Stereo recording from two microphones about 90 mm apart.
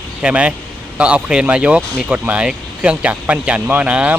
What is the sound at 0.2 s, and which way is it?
Speech, 10° right (ahead or behind).